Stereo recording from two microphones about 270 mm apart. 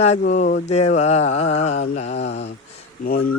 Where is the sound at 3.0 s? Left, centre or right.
Left.